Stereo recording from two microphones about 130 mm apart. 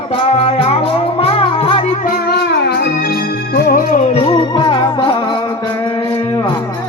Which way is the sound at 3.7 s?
90° left.